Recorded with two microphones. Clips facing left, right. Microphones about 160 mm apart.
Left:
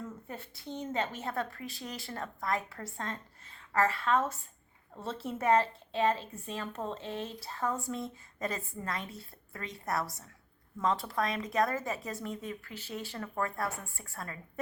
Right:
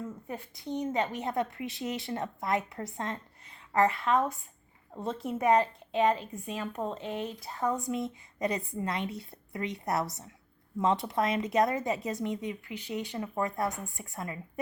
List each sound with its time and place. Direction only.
0.3 s a woman's voice: 15° right (ahead or behind)